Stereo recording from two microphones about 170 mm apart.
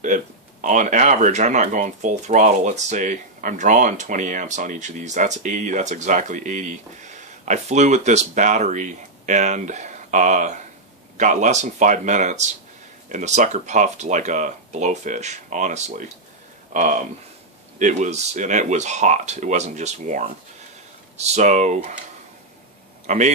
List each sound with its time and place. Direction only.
0.0 s speech: 45° right (ahead or behind)
23.0 s speech: 45° right (ahead or behind)